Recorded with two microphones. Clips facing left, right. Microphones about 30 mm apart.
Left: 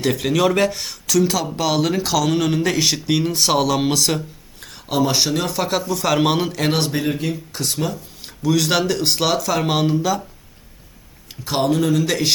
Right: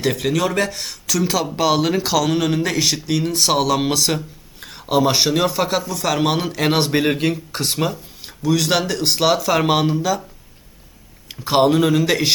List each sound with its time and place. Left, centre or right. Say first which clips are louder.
0.0 s speech: left 1 dB; centre
6.9 s speech: right 4 dB; right
7.6 s speech: right 2 dB; right
8.2 s speech: even; centre
9.8 s speech: even; centre
11.3 s speech: right 4 dB; right